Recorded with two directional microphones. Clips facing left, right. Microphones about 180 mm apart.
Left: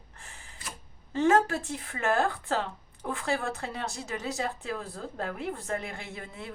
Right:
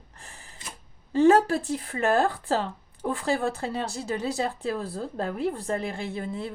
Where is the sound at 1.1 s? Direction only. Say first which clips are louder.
Right 5 dB; 35° right (ahead or behind).